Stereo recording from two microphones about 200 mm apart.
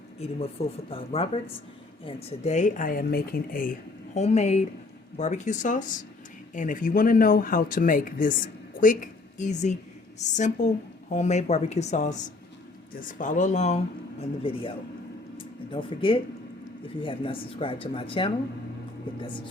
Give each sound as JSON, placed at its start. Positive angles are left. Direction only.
{"t": 0.2, "sound": "a woman's voice", "side_deg": 30}